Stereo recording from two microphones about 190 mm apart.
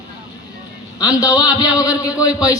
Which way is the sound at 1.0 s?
20° left (ahead or behind).